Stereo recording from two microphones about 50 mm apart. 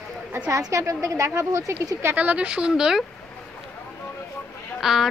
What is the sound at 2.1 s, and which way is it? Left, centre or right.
Speech, right.